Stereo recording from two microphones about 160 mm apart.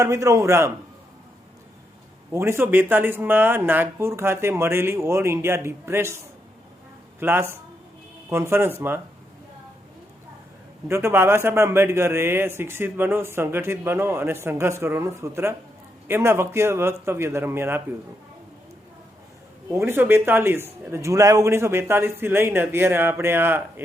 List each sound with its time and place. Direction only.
0.0 s a man's voice: 20° right (ahead or behind)
2.3 s a man's voice: 15° right (ahead or behind)
7.2 s a man's voice: 15° right (ahead or behind)
10.8 s a man's voice: 15° right (ahead or behind)
19.7 s a man's voice: 15° right (ahead or behind)